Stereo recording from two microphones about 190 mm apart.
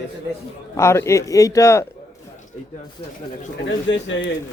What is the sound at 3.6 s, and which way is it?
Speech, 75° left (ahead or behind).